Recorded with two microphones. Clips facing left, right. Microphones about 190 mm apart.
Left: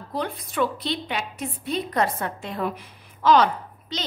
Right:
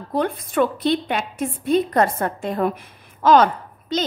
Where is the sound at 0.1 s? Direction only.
50° right (ahead or behind).